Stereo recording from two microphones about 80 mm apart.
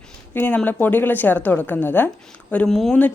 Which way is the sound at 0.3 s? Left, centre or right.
Left.